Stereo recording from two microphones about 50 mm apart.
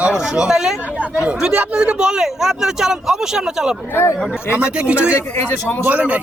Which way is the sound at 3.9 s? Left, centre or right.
Left.